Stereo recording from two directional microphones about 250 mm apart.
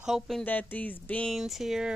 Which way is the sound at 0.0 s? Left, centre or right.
Centre.